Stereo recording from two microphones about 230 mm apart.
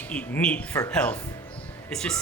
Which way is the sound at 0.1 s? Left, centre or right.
Centre.